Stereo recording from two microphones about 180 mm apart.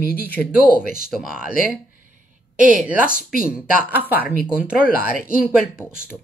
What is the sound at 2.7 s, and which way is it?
Speech, 10° right (ahead or behind).